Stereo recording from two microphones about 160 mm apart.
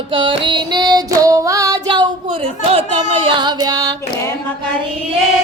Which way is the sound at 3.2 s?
30° right (ahead or behind).